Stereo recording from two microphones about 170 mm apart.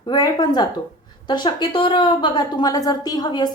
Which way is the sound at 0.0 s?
25° left (ahead or behind).